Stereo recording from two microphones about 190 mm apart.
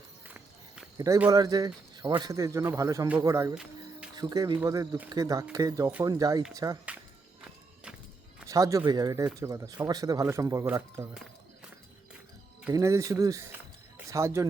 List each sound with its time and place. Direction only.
0.9 s speech: 15° right (ahead or behind)
3.5 s music: 5° right (ahead or behind)
4.1 s speech: 20° right (ahead or behind)
8.4 s speech: 15° right (ahead or behind)
12.7 s speech: 15° right (ahead or behind)